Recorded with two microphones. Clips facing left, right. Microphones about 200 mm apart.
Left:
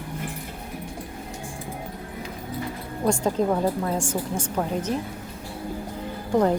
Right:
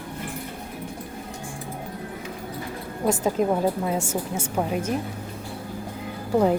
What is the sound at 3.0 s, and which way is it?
A woman's voice, 5° right (ahead or behind).